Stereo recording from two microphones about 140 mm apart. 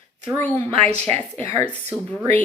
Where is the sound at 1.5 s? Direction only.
10° left (ahead or behind).